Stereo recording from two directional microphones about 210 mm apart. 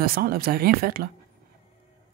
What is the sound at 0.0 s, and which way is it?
Speech, 45° right (ahead or behind).